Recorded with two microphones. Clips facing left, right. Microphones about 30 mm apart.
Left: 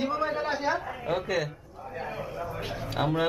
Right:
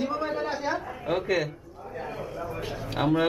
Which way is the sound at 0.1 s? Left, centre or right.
Centre.